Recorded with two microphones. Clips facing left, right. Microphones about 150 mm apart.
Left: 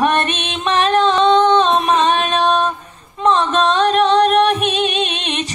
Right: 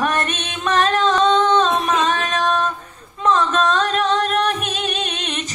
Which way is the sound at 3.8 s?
15° left (ahead or behind).